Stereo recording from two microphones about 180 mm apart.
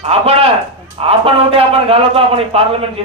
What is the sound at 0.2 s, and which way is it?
Speech, 35° right (ahead or behind).